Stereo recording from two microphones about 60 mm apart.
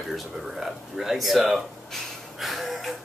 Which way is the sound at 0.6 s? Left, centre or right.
Centre.